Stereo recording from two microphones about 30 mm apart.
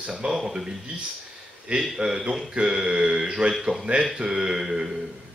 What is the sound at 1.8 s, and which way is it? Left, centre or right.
A man's voice, right.